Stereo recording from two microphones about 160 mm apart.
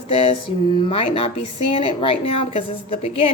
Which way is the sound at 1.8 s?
35° left (ahead or behind).